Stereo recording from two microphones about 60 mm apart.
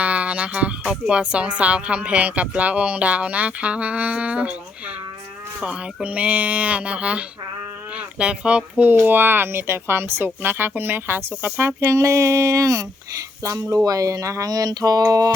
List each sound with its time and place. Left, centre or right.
0.0 s speech: right
5.5 s speech: centre
8.9 s a woman's voice: right
11.8 s speech: right